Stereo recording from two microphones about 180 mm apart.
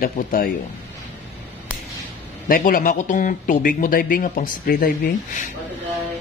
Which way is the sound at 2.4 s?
50° left (ahead or behind).